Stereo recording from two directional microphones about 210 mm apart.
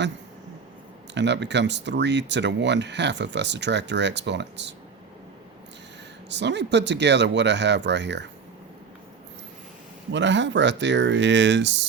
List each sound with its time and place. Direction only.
1.1 s speech: 55° right (ahead or behind)
6.2 s speech: 55° right (ahead or behind)
10.1 s speech: 60° right (ahead or behind)